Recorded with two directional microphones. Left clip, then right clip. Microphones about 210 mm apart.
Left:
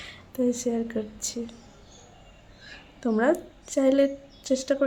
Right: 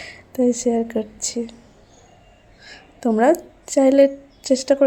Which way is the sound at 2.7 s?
20° right (ahead or behind).